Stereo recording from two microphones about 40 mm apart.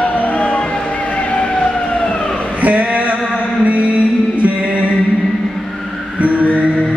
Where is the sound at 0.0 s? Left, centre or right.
Left.